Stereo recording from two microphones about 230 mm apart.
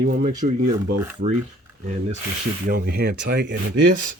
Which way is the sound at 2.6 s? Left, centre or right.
Right.